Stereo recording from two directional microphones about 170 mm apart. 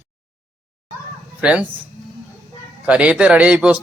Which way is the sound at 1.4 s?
5° right (ahead or behind).